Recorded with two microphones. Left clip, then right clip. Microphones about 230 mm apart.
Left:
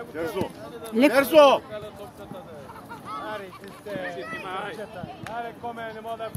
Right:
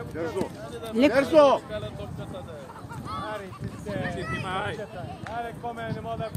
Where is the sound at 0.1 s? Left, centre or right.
Left.